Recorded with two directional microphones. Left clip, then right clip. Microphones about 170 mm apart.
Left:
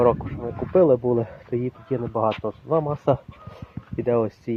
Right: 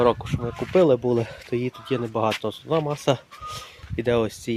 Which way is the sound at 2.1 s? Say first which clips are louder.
Left 1 dB; 65° right (ahead or behind).